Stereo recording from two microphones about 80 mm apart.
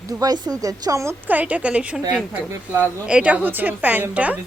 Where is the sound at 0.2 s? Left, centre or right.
Right.